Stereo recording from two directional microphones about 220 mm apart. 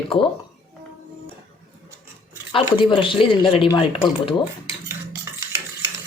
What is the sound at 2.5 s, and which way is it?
Speech, 25° left (ahead or behind).